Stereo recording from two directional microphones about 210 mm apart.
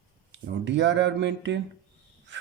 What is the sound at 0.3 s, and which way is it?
Speech, 60° right (ahead or behind).